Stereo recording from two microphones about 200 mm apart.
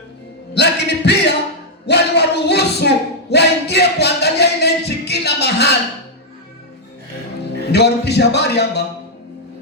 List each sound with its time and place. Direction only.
0.5 s music: 60° left (ahead or behind)
1.9 s a sound: 60° left (ahead or behind)
7.7 s a man's voice: 55° left (ahead or behind)